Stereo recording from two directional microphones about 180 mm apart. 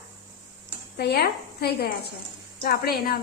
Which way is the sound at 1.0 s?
65° left (ahead or behind).